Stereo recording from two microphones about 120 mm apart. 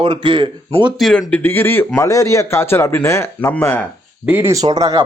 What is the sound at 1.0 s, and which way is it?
Speech, 5° left (ahead or behind).